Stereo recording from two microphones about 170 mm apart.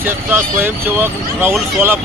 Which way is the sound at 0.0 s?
10° right (ahead or behind).